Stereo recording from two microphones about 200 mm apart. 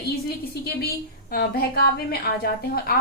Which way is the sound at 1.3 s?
50° left (ahead or behind).